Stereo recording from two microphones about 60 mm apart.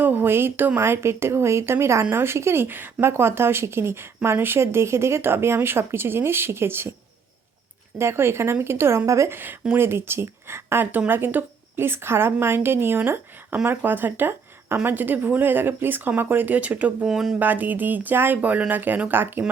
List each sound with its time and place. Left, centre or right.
0.0 s speech: right
7.9 s speech: right
9.0 s a woman's voice: right
9.3 s speech: right
17.1 s speech: centre
17.4 s speech: right